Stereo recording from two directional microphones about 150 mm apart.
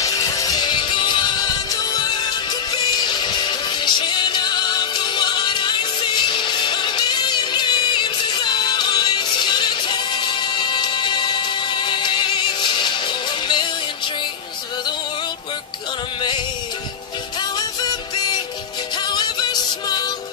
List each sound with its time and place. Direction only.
0.0 s music: 25° left (ahead or behind)
17.4 s music: 30° left (ahead or behind)